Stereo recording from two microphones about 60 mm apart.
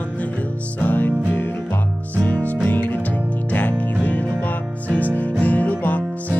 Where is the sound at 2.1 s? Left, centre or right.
Left.